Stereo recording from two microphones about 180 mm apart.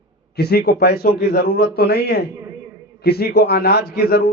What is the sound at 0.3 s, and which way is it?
A man's voice, 65° left (ahead or behind).